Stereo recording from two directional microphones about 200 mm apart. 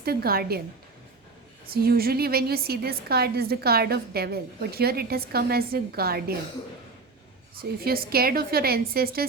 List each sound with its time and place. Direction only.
0.0 s a woman's voice: 50° right (ahead or behind)
1.6 s a woman's voice: 50° right (ahead or behind)
7.5 s a woman's voice: 50° right (ahead or behind)